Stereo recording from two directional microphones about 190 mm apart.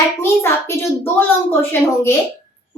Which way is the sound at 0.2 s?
15° left (ahead or behind).